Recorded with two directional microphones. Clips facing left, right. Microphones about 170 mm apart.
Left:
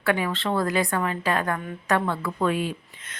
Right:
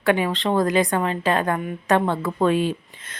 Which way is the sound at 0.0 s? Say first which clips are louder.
Right 4 dB; 20° right (ahead or behind).